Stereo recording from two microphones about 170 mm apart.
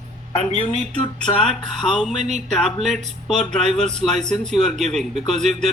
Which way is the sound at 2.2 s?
40° right (ahead or behind).